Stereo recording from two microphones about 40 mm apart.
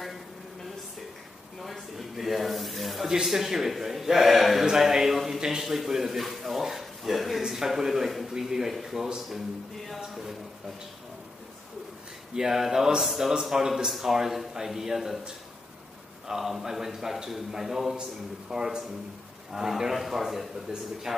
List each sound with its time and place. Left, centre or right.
1.6 s snake: centre
3.1 s a man's voice: centre
12.4 s a man's voice: centre